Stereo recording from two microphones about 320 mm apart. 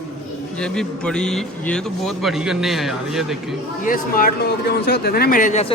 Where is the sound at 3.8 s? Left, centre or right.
Left.